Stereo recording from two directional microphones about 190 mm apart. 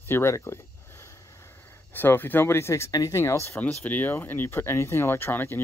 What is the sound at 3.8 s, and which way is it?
Speech, 10° left (ahead or behind).